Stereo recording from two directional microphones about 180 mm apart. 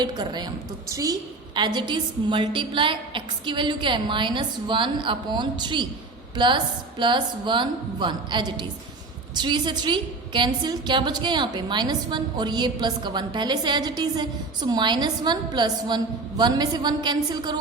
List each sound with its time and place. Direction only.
0.0 s a woman's voice: 25° right (ahead or behind)